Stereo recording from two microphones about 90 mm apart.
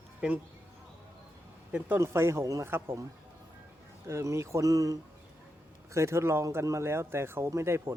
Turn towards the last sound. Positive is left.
turn(degrees=-30)  # may be behind; listen again after turning